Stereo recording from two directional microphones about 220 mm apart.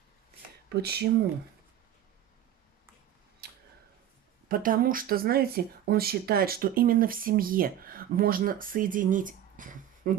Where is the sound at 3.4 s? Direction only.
45° right (ahead or behind).